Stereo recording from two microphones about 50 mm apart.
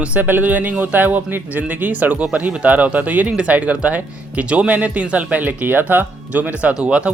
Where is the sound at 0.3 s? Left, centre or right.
Right.